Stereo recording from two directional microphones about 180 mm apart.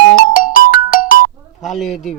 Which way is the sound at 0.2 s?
50° left (ahead or behind).